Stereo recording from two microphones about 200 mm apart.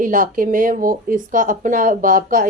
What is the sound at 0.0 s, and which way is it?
Speech, 45° right (ahead or behind).